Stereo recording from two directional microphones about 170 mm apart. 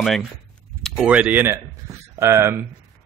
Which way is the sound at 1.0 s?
5° right (ahead or behind).